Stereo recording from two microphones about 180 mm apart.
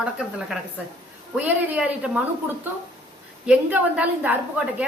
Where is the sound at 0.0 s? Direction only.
5° right (ahead or behind).